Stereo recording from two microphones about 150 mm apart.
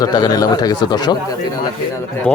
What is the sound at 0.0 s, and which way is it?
Speech, 25° left (ahead or behind).